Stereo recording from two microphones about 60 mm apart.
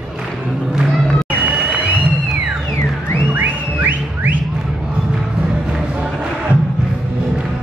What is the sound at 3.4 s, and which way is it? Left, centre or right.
Music, right.